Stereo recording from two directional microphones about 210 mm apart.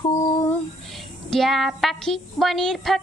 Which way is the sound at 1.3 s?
Centre (ahead or behind).